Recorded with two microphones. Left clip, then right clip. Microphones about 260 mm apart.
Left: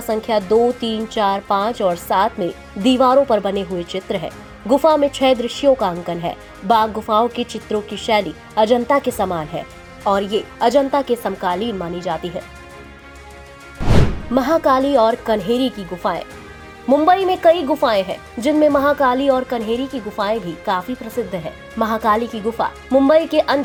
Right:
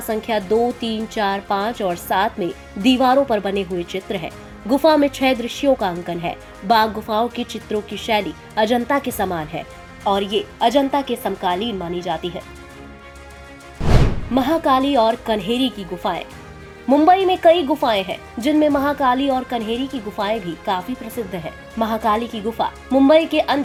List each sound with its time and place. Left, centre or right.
0.1 s speech: centre
14.3 s speech: left